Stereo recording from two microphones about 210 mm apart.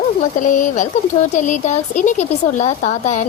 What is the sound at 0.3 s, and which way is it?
A woman's voice, 40° left (ahead or behind).